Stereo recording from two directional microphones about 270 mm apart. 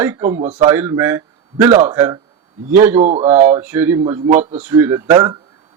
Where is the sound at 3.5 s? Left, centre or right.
Centre.